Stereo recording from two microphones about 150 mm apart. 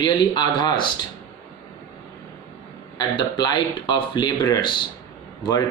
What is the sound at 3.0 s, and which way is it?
Speech, 30° left (ahead or behind).